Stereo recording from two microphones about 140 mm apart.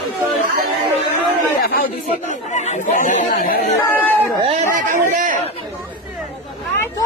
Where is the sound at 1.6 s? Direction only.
90° left.